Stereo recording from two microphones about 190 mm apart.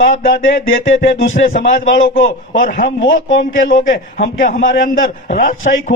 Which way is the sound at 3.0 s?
90° left.